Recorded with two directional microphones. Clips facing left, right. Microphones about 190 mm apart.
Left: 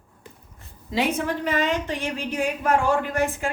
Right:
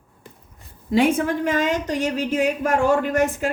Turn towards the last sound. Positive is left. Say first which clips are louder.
# right 4 dB
turn(degrees=-40)  # may be behind; listen again after turning